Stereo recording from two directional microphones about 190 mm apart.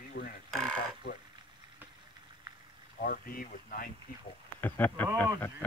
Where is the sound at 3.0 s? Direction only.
50° left (ahead or behind).